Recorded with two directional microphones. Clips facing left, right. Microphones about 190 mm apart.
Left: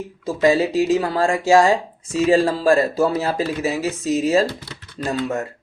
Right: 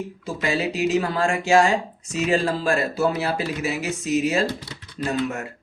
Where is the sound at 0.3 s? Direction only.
35° left (ahead or behind).